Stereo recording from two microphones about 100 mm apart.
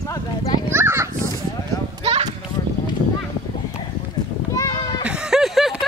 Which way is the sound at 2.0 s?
70° right (ahead or behind).